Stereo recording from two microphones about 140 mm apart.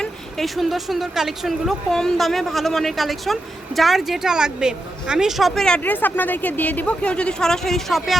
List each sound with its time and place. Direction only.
0.0 s a woman's voice: centre (ahead or behind)